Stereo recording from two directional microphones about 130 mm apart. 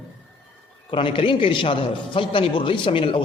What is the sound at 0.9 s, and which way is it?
A man's voice, 45° left (ahead or behind).